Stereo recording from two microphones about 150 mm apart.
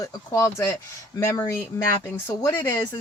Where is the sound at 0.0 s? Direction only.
20° left (ahead or behind).